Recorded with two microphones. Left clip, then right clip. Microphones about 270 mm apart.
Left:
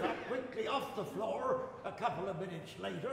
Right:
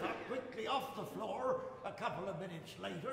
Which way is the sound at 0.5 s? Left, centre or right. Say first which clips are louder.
Left 1 dB; right.